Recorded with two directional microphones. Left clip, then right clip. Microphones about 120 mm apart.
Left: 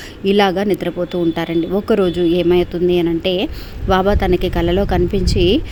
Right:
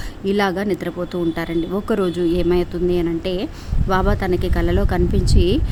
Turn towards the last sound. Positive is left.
turn(degrees=15)  # may be behind; listen again after turning